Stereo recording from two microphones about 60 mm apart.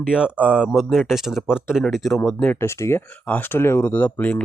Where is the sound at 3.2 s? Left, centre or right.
Left.